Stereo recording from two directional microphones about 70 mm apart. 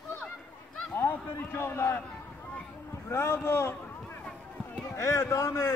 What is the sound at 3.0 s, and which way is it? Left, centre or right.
Speech, left.